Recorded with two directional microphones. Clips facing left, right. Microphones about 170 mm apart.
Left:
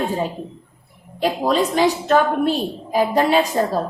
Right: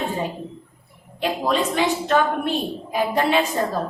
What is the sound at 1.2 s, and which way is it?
A woman's voice, 40° left (ahead or behind).